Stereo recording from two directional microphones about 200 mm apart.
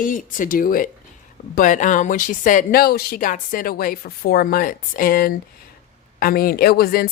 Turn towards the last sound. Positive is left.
turn(degrees=50)  # may be behind; listen again after turning